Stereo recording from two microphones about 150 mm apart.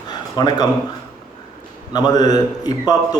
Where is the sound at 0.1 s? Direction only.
25° left (ahead or behind).